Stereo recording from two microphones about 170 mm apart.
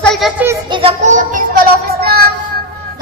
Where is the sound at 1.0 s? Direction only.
45° right (ahead or behind).